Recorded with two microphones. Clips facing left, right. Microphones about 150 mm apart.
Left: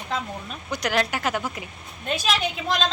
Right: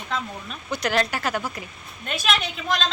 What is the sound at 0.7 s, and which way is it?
Speech, 15° left (ahead or behind).